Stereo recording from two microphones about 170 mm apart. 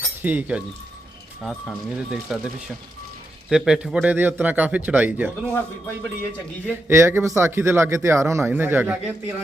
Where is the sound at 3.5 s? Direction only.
5° right (ahead or behind).